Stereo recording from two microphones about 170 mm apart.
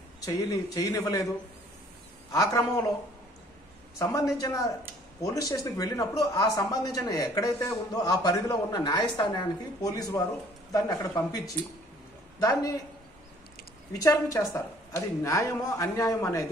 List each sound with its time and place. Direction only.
0.2 s speech: 20° left (ahead or behind)
2.3 s speech: 20° left (ahead or behind)
4.0 s speech: 20° left (ahead or behind)
13.9 s a woman's voice: 20° left (ahead or behind)